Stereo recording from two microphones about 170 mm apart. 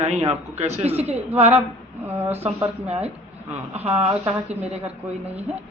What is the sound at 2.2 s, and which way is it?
Speech, 40° right (ahead or behind).